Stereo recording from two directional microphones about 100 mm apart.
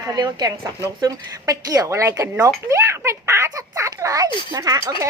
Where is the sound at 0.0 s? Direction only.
45° right (ahead or behind).